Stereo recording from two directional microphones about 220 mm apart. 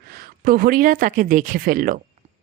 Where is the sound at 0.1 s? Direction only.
40° right (ahead or behind).